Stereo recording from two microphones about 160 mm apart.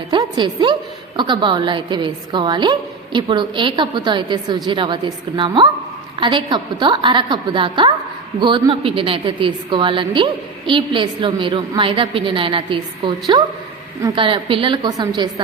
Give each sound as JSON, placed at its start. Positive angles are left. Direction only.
{"t": 0.1, "sound": "a woman's voice", "side_deg": -30}